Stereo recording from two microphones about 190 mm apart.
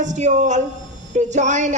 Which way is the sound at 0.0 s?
40° right (ahead or behind).